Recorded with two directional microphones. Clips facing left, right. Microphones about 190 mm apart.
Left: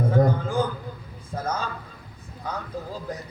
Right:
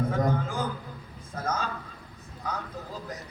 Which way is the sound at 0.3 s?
30° left (ahead or behind).